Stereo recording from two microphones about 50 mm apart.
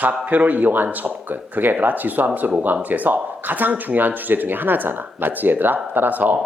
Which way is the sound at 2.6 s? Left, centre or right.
Right.